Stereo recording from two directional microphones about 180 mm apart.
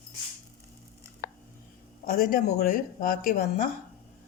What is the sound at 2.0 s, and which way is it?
A man's voice, 55° left (ahead or behind).